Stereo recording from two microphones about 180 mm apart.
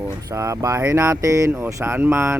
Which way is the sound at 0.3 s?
15° right (ahead or behind).